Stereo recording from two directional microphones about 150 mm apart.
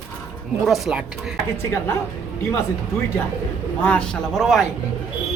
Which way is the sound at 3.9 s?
5° left (ahead or behind).